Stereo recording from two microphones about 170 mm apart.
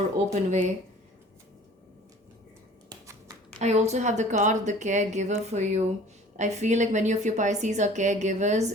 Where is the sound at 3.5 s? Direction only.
40° right (ahead or behind).